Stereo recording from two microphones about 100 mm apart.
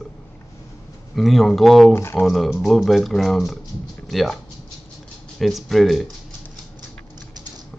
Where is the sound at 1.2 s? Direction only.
Centre (ahead or behind).